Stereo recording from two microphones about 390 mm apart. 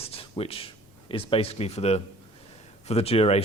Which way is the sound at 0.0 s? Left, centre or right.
Centre.